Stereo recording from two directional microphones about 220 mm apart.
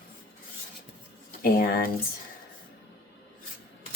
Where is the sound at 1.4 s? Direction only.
45° left (ahead or behind).